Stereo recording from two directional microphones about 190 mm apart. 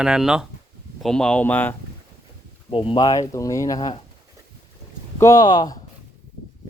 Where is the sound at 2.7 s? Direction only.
30° left (ahead or behind).